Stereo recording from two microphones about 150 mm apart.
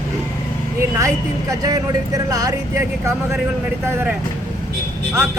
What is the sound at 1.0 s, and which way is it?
Speech, 20° right (ahead or behind).